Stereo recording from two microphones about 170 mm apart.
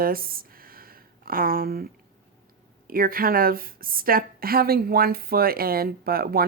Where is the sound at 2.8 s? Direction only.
60° right (ahead or behind).